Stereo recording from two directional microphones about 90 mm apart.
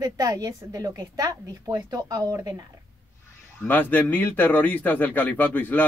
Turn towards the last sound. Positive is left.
turn(degrees=20)  # may be behind; listen again after turning